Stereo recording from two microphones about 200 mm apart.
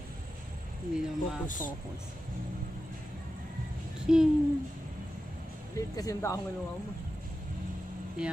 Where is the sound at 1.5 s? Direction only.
40° left (ahead or behind).